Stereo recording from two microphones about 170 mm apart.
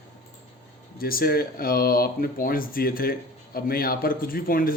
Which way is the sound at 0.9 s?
60° left (ahead or behind).